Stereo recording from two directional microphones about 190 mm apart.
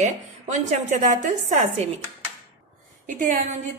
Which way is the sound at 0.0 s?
40° right (ahead or behind).